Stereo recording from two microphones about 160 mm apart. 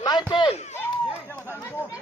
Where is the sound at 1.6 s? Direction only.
15° left (ahead or behind).